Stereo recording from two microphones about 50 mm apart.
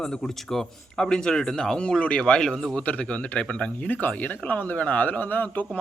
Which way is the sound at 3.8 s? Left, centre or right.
Left.